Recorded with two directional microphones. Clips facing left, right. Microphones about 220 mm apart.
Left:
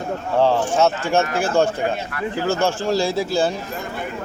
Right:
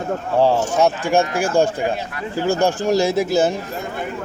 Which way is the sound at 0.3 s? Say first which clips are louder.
Right 1 dB; 10° right (ahead or behind).